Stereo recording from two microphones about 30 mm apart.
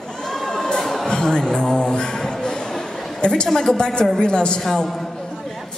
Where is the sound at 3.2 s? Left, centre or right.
Left.